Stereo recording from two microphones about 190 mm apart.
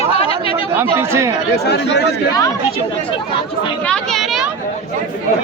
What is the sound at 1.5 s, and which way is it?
Speech, 60° left (ahead or behind).